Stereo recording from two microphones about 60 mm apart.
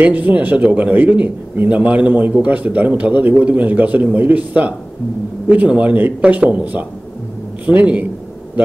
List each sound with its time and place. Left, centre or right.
0.0 s a man's voice: right